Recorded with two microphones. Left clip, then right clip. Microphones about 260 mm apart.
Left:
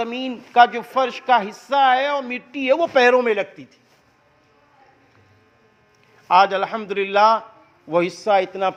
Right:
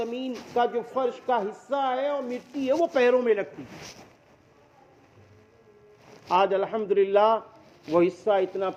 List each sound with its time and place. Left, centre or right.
0.0 s speech: left
6.2 s speech: left